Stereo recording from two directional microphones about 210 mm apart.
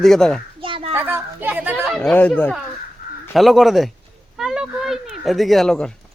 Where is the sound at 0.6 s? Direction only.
25° right (ahead or behind).